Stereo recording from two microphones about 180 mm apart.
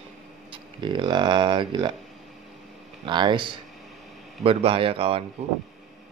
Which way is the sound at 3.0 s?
25° right (ahead or behind).